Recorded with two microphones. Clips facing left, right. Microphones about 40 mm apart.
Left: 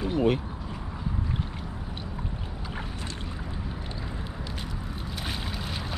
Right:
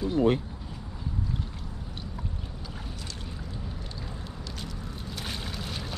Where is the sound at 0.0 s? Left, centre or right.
Left.